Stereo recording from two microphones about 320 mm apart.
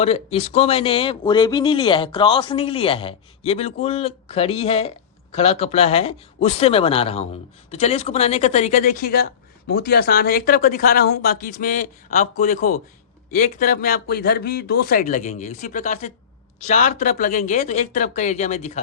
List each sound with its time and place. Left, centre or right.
0.0 s speech: centre